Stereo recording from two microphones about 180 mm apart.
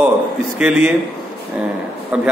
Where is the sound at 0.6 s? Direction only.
5° right (ahead or behind).